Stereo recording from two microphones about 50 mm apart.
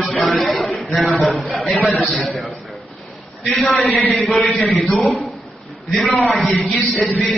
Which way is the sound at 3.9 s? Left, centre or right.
Left.